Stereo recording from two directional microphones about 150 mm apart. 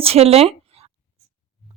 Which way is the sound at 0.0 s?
40° right (ahead or behind).